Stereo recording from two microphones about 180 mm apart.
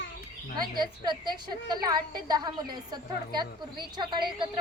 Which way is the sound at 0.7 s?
25° right (ahead or behind).